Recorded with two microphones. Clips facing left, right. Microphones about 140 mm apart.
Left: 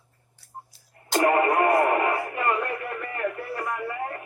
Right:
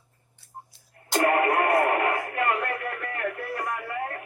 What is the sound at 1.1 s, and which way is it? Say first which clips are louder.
Speech: left 1 dB; 25° left (ahead or behind).